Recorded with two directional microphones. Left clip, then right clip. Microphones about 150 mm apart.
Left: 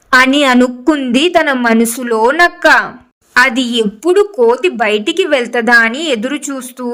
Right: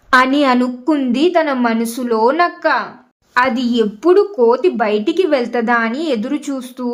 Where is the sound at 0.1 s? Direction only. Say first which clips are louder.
Left 3 dB; 40° left (ahead or behind).